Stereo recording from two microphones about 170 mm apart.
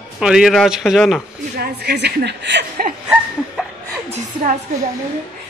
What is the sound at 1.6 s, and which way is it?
A woman's voice, 70° right (ahead or behind).